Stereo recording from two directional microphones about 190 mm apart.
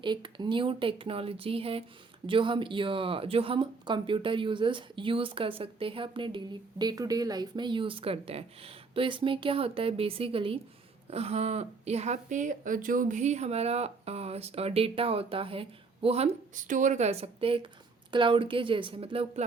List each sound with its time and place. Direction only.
0.0 s speech: 25° right (ahead or behind)